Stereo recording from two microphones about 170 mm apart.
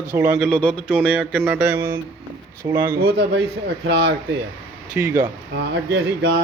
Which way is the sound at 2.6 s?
25° right (ahead or behind).